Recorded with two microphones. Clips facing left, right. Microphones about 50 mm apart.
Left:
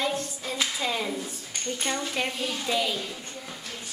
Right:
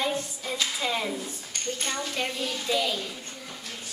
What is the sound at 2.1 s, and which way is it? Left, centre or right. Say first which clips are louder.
Speech: left 1 dB; centre.